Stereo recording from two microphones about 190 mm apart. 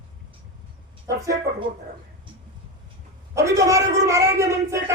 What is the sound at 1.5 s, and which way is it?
Speech, 65° right (ahead or behind).